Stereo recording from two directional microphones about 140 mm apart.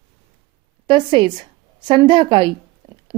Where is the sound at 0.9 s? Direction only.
35° right (ahead or behind).